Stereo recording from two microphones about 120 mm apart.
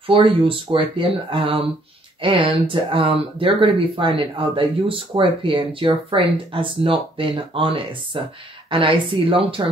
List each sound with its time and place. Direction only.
0.0 s speech: 50° right (ahead or behind)